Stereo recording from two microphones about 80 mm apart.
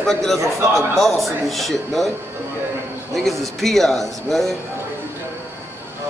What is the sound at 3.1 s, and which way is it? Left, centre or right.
A man's voice, centre.